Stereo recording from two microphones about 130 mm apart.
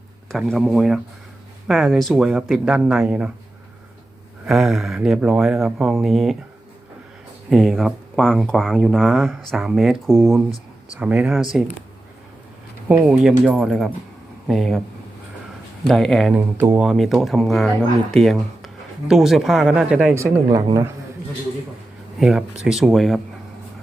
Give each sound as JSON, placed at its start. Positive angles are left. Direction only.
{"t": 0.3, "sound": "speech", "side_deg": 0}
{"t": 4.4, "sound": "speech", "side_deg": -5}
{"t": 7.5, "sound": "speech", "side_deg": 0}
{"t": 12.9, "sound": "speech", "side_deg": -10}
{"t": 15.9, "sound": "speech", "side_deg": 0}
{"t": 16.3, "sound": "speech", "side_deg": -15}
{"t": 16.8, "sound": "speech", "side_deg": 0}
{"t": 20.1, "sound": "speech", "side_deg": -25}
{"t": 22.2, "sound": "speech", "side_deg": -5}